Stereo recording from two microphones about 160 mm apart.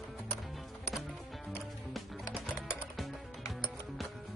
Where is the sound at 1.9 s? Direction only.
5° right (ahead or behind).